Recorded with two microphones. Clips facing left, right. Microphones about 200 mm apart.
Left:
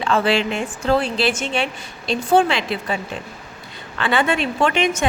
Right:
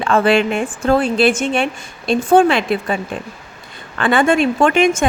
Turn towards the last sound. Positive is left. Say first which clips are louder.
# right 5 dB
turn(degrees=-50)  # may be behind; listen again after turning